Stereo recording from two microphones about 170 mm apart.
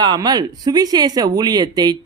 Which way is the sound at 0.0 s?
25° right (ahead or behind).